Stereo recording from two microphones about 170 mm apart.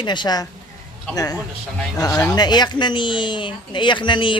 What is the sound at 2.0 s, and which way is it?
Speech, 20° left (ahead or behind).